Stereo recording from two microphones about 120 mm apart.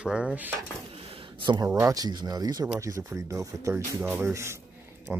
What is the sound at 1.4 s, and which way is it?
Speech, 40° right (ahead or behind).